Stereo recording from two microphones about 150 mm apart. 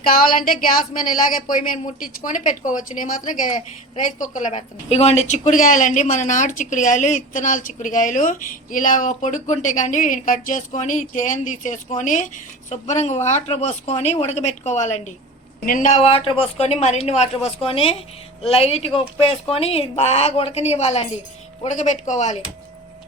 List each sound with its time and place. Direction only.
0.0 s a woman's voice: 75° left (ahead or behind); by 15.1 s 50° left (ahead or behind)
15.6 s a woman's voice: 60° left (ahead or behind)
16.0 s speech: 40° left (ahead or behind)